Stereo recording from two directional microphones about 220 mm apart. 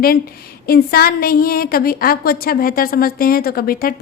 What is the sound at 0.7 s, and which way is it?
Speech, 45° left (ahead or behind).